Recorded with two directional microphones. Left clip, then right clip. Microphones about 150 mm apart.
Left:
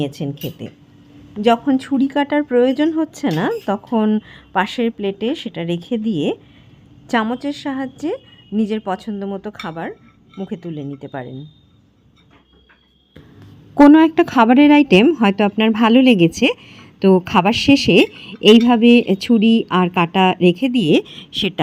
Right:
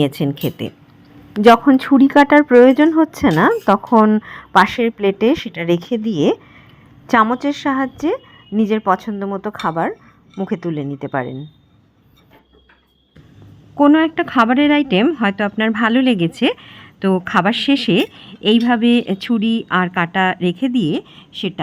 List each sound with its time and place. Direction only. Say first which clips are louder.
0.0 s speech: right 6 dB; 15° right (ahead or behind)
1.6 s a woman's voice: right 6 dB; 5° right (ahead or behind)
9.6 s a woman's voice: right 8 dB; 10° right (ahead or behind)
13.7 s a woman's voice: left 3 dB; 20° left (ahead or behind)
19.4 s speech: left 5 dB; 50° right (ahead or behind)
19.6 s a woman's voice: even; 5° left (ahead or behind)
20.4 s speech: left 4 dB; 45° right (ahead or behind)
20.7 s speech: left 4 dB; 15° left (ahead or behind)